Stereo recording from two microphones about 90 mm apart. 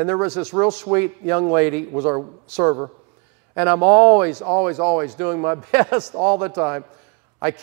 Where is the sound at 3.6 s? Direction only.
15° right (ahead or behind).